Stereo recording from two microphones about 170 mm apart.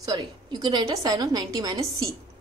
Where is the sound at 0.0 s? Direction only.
25° right (ahead or behind).